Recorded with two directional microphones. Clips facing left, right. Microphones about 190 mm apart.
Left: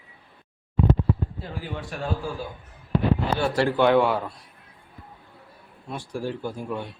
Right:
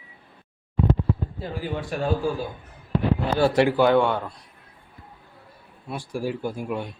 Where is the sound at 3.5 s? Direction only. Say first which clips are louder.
Right 3 dB; 15° right (ahead or behind).